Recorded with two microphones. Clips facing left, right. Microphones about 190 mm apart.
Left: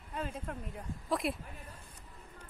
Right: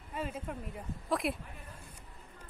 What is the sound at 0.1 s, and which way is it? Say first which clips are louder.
Speech: right 1 dB; 5° right (ahead or behind).